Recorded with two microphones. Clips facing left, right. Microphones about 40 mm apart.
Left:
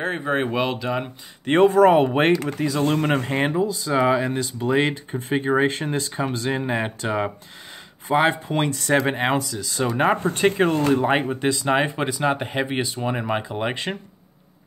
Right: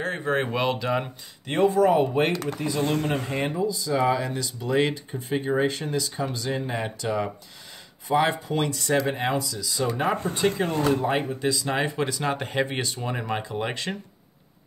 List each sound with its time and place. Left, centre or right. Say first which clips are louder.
0.0 s speech: left 2 dB; left; by 1.1 s centre
1.4 s speech: left 6 dB; left
2.6 s speech: left 4 dB; left
3.3 s speech: left 4 dB; left
3.9 s speech: left 4 dB; left
12.2 s speech: left 5 dB; centre